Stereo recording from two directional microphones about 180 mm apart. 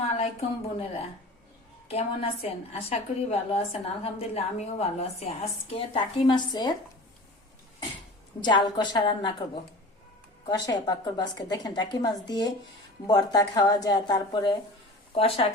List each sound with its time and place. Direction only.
0.2 s a woman's voice: 35° left (ahead or behind)
1.9 s a woman's voice: 35° left (ahead or behind)
8.4 s a woman's voice: 25° left (ahead or behind)
10.4 s a woman's voice: 20° left (ahead or behind)